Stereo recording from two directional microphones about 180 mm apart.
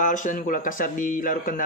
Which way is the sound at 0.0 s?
45° left (ahead or behind).